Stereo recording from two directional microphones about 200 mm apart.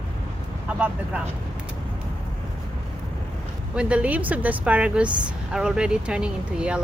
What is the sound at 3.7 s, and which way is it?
A woman's voice, 5° right (ahead or behind).